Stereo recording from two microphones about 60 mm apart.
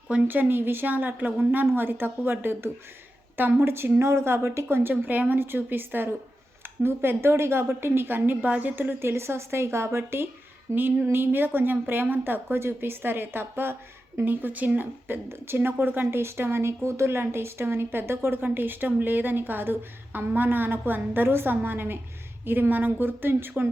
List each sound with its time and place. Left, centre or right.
0.3 s a woman's voice: right
9.0 s a woman's voice: right